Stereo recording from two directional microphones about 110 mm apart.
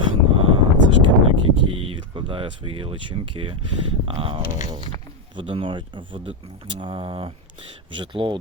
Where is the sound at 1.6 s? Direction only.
50° right (ahead or behind).